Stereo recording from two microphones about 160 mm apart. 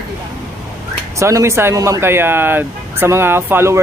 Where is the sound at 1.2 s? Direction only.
20° right (ahead or behind).